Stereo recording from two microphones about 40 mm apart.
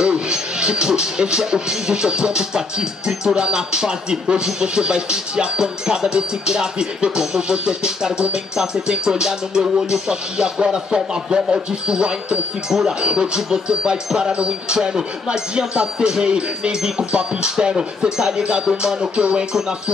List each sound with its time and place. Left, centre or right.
0.0 s speech: right